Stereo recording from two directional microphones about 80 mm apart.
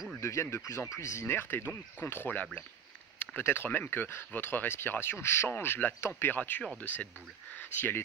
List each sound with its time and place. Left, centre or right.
0.2 s speech: left
1.2 s speech: left